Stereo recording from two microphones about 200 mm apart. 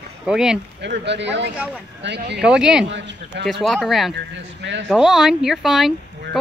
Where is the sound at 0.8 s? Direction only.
60° right (ahead or behind).